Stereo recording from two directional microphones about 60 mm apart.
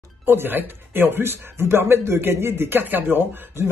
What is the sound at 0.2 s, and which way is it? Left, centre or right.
Speech, right.